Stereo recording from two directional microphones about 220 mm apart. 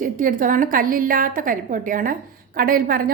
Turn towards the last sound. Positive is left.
turn(degrees=-40)  # may be behind; listen again after turning